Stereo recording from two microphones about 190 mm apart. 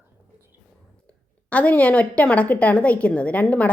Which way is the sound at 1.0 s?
5° left (ahead or behind).